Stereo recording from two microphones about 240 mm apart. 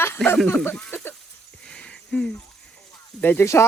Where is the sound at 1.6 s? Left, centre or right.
Centre.